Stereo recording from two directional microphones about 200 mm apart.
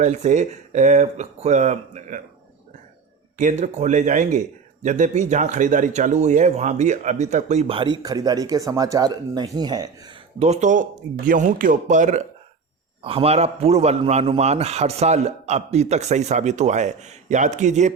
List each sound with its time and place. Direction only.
0.0 s speech: 35° right (ahead or behind)
3.3 s speech: 35° right (ahead or behind); by 9.9 s 20° right (ahead or behind)
10.4 s speech: 35° right (ahead or behind)
13.0 s speech: 25° right (ahead or behind)